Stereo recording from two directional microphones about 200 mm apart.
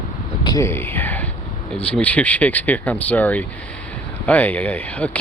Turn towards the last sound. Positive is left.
turn(degrees=5)  # may be behind; listen again after turning